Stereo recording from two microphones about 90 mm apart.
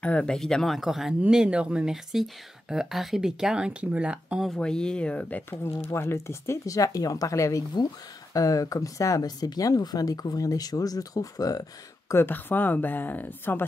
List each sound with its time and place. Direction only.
0.0 s speech: 10° left (ahead or behind); by 4.5 s 10° right (ahead or behind)
4.5 s speech: 10° left (ahead or behind)
5.5 s speech: 30° left (ahead or behind)
12.1 s speech: 25° left (ahead or behind)